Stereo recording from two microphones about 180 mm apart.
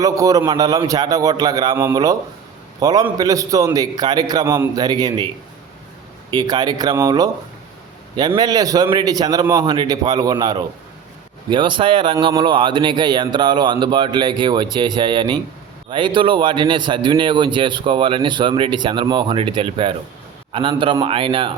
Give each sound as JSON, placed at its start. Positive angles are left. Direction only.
{"t": 0.0, "sound": "a man's voice", "side_deg": -20}
{"t": 6.3, "sound": "a man's voice", "side_deg": -20}
{"t": 8.4, "sound": "a man's voice", "side_deg": -20}